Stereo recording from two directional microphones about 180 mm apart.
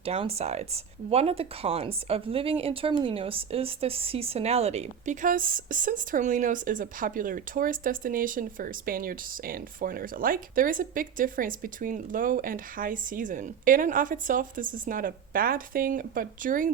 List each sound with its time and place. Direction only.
0.0 s a woman's voice: 35° right (ahead or behind)